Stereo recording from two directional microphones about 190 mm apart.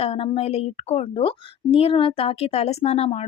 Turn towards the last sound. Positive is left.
turn(degrees=35)  # may be behind; listen again after turning